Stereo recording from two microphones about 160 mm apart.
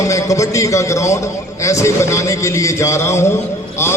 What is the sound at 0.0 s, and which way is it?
A man's voice, 20° left (ahead or behind).